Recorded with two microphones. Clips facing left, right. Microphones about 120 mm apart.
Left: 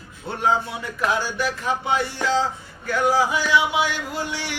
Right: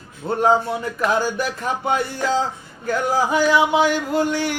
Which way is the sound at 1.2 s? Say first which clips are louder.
Right 2 dB; 45° right (ahead or behind).